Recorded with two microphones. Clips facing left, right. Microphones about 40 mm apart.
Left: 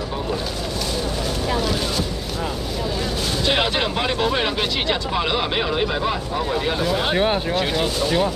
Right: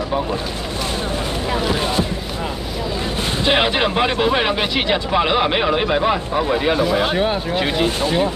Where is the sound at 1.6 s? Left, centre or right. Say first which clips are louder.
Right 4 dB; right.